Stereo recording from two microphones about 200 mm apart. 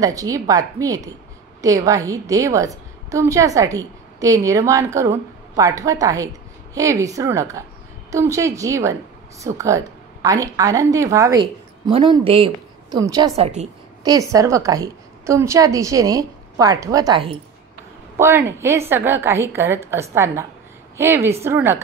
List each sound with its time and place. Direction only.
0.0 s a woman's voice: 15° right (ahead or behind)
13.4 s a woman's voice: 35° right (ahead or behind)
14.0 s a woman's voice: 15° right (ahead or behind)
18.2 s a woman's voice: 15° right (ahead or behind)